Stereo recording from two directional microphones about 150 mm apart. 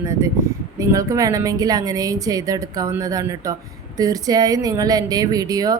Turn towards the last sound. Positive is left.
turn(degrees=-25)  # may be behind; listen again after turning